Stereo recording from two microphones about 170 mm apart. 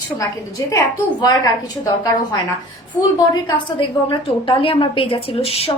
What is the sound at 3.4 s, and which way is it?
A woman's voice, 30° left (ahead or behind).